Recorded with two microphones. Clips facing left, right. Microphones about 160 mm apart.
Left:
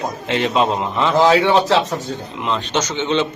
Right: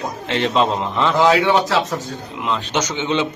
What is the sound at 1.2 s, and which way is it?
Speech, 30° left (ahead or behind).